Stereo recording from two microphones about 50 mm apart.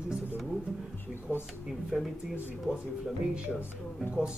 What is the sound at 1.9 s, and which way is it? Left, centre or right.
Speech, centre.